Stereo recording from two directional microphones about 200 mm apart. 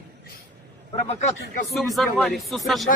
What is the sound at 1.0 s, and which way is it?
Speech, 35° left (ahead or behind).